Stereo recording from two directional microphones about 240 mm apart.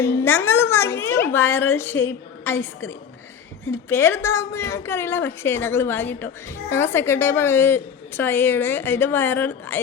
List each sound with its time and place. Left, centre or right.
0.0 s a woman's voice: centre